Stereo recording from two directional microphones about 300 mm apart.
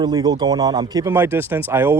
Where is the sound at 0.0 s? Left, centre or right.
Centre.